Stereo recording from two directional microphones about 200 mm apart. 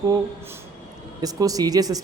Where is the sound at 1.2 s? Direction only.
20° right (ahead or behind).